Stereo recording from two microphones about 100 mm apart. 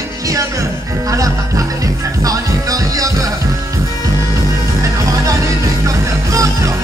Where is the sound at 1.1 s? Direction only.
35° right (ahead or behind).